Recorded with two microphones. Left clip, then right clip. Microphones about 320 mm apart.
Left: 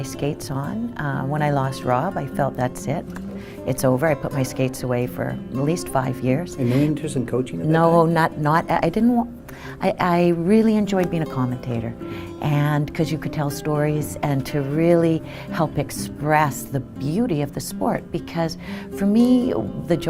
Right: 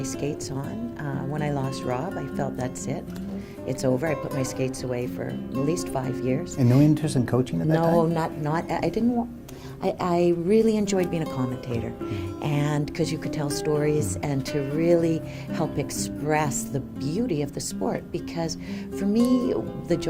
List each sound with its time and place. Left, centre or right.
0.2 s a woman's voice: left
6.6 s speech: right
7.7 s a woman's voice: left